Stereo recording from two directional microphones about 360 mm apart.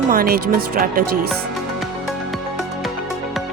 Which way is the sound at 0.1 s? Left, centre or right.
Right.